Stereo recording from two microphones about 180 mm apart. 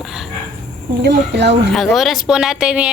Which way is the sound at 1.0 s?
70° right (ahead or behind).